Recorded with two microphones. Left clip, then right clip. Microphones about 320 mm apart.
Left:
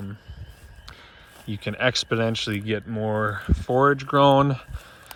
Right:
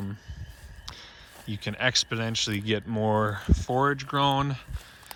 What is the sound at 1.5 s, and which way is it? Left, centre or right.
Speech, centre.